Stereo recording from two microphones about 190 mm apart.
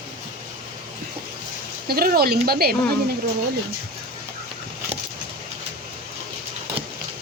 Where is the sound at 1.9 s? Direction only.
50° right (ahead or behind).